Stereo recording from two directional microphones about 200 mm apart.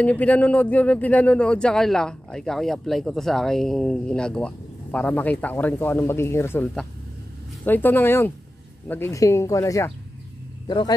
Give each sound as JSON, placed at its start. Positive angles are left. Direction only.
{"t": 0.0, "sound": "speech", "side_deg": 5}